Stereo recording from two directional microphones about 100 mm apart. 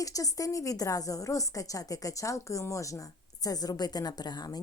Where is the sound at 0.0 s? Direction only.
35° left (ahead or behind).